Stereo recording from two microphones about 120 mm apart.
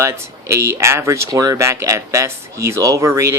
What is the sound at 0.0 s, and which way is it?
Speech, 25° right (ahead or behind).